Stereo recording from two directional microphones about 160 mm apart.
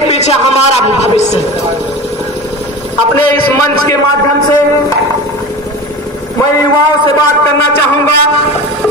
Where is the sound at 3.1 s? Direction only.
15° left (ahead or behind).